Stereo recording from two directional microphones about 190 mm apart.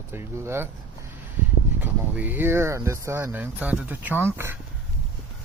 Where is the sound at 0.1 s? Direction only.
15° right (ahead or behind).